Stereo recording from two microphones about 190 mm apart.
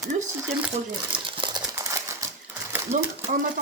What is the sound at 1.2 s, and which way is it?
Crumpling, 25° right (ahead or behind).